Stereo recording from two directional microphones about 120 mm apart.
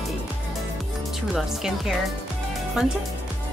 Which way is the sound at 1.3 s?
5° right (ahead or behind).